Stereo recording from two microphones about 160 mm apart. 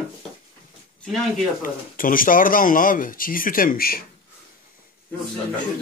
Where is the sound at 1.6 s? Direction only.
60° left (ahead or behind).